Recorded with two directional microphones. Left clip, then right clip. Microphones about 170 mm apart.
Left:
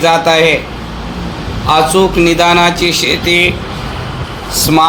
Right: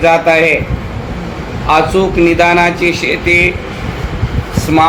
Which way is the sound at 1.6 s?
35° left (ahead or behind).